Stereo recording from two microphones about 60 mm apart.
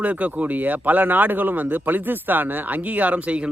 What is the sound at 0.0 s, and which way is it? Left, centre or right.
Speech, right.